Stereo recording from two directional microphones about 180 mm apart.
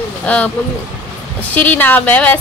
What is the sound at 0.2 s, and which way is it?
Speech, 10° left (ahead or behind).